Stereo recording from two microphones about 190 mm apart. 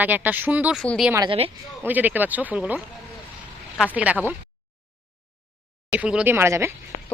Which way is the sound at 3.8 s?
5° right (ahead or behind).